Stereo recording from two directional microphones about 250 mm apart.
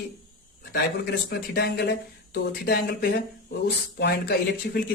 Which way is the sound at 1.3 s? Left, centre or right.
Left.